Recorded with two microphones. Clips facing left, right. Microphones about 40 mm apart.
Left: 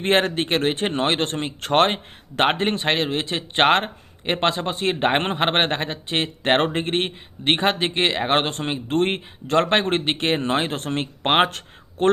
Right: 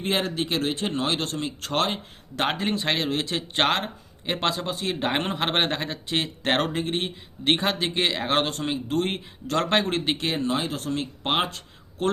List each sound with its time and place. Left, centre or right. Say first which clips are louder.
0.0 s speech: left 6 dB; left
2.8 s speech: left 3 dB; left
6.8 s speech: left 4 dB; left